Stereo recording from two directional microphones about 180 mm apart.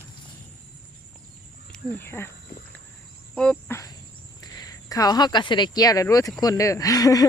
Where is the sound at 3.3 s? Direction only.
5° left (ahead or behind).